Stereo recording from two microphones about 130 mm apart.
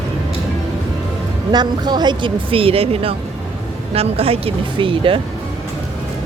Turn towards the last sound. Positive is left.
turn(degrees=-40)  # may be behind; listen again after turning